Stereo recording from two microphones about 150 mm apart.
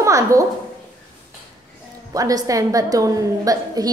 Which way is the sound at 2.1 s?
25° right (ahead or behind).